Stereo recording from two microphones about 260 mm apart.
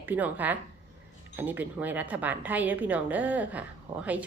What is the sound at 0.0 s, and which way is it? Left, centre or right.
A woman's voice, centre.